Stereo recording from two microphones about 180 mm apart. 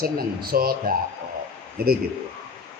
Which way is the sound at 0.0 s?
55° right (ahead or behind).